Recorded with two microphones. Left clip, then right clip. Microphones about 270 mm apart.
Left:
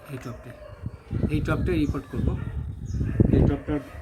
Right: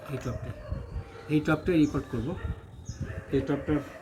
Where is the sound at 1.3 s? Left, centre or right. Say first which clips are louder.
Right 2 dB; centre.